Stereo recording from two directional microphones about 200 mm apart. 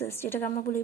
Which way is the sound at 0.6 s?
45° left (ahead or behind).